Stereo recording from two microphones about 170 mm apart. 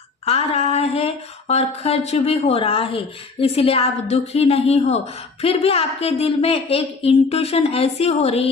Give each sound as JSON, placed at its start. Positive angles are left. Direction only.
{"t": 0.3, "sound": "a woman's voice", "side_deg": 35}